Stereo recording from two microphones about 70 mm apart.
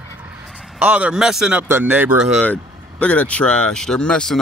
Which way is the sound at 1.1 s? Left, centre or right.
Centre.